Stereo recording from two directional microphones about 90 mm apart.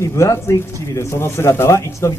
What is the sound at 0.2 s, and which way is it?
Speech, 35° left (ahead or behind).